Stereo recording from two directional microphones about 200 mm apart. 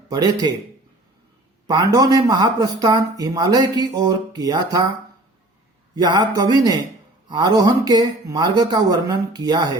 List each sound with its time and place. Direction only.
0.1 s speech: 20° right (ahead or behind)
1.6 s speech: 20° right (ahead or behind)
5.9 s speech: 20° right (ahead or behind)